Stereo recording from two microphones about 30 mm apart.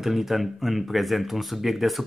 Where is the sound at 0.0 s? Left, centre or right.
Centre.